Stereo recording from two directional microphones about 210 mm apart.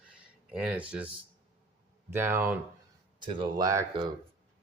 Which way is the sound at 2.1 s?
10° right (ahead or behind).